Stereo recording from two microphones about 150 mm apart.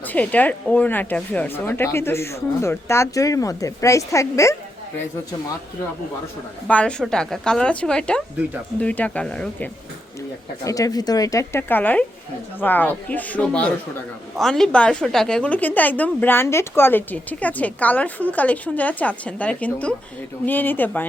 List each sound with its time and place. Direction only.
0.0 s a woman's voice: 10° left (ahead or behind)
6.7 s a woman's voice: 10° left (ahead or behind)
10.6 s a woman's voice: 20° left (ahead or behind)